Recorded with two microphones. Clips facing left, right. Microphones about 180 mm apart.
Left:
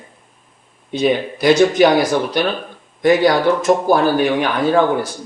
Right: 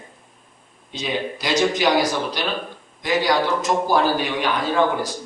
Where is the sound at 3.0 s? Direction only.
55° left (ahead or behind).